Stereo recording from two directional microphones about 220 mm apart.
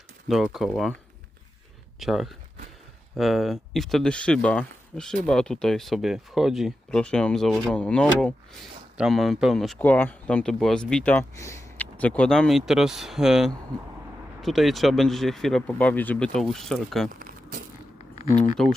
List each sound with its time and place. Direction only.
0.3 s speech: centre (ahead or behind)
2.0 s speech: centre (ahead or behind)
17.2 s vehicle: 40° right (ahead or behind)
18.2 s speech: 30° left (ahead or behind)